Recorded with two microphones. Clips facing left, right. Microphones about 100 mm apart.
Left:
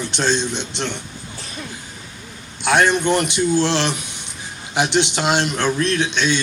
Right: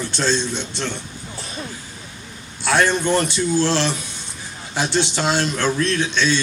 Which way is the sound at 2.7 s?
20° left (ahead or behind).